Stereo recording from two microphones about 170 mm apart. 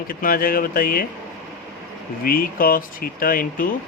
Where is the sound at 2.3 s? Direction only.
55° left (ahead or behind).